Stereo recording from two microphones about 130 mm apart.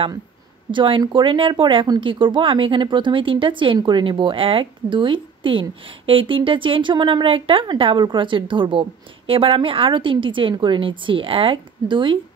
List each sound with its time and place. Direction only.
0.7 s speech: 40° right (ahead or behind)